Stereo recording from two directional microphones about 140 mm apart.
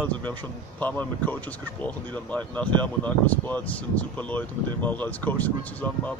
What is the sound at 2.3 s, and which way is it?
Speech, 10° left (ahead or behind).